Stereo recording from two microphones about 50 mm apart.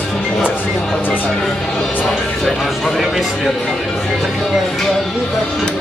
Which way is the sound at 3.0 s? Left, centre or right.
Centre.